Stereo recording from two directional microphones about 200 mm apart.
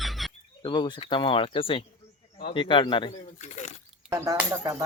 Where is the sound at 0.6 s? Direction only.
20° left (ahead or behind).